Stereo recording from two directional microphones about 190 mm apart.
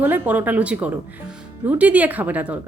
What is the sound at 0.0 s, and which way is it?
Speech, 10° right (ahead or behind).